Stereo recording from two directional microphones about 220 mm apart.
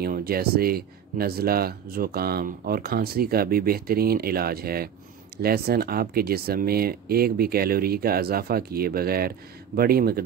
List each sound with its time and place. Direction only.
0.0 s speech: 45° right (ahead or behind)